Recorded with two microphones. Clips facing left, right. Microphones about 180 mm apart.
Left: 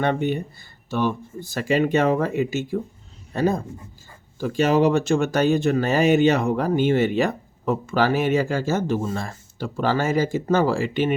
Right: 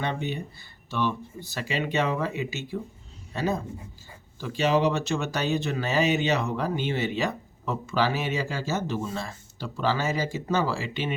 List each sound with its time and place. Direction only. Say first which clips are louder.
0.0 s speech: left 8 dB; 55° left (ahead or behind)